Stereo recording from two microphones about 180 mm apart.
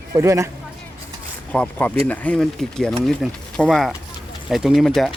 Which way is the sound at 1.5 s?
5° left (ahead or behind).